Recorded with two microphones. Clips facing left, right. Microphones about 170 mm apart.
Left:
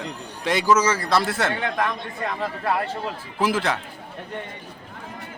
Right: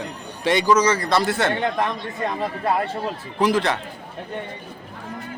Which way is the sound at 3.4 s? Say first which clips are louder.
Right 3 dB; 5° left (ahead or behind).